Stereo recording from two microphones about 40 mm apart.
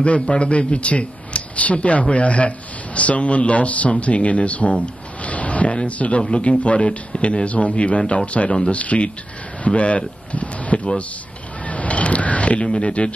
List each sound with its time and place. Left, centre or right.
0.0 s speech: left
11.6 s a sound: left
12.6 s speech: left